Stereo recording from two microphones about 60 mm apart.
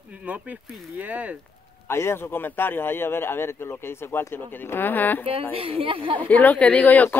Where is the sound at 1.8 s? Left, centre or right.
Left.